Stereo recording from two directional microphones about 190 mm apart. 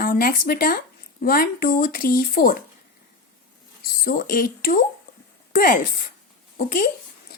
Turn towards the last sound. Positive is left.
turn(degrees=50)  # may be behind; listen again after turning